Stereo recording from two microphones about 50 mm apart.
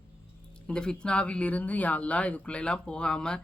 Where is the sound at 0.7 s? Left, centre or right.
Centre.